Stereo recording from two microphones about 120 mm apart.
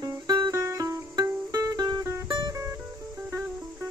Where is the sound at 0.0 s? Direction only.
30° right (ahead or behind).